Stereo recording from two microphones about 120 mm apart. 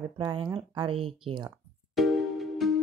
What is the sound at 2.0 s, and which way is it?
Music, centre (ahead or behind).